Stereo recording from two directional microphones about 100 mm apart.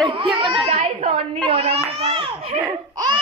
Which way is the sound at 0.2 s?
55° right (ahead or behind).